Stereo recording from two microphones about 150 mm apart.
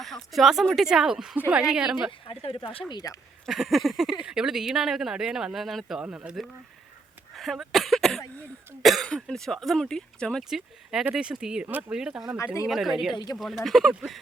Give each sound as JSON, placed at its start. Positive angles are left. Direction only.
{"t": 0.0, "sound": "speech", "side_deg": 0}
{"t": 2.2, "sound": "speech", "side_deg": 35}
{"t": 2.9, "sound": "speech", "side_deg": 25}
{"t": 3.4, "sound": "speech", "side_deg": 0}
{"t": 7.3, "sound": "cough", "side_deg": 0}
{"t": 8.8, "sound": "speech", "side_deg": 0}